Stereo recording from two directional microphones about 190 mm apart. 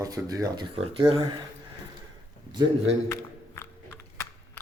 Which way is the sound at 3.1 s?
10° left (ahead or behind).